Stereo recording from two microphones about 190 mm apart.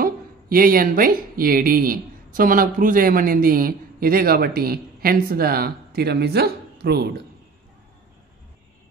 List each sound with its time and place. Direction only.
0.0 s speech: 50° right (ahead or behind)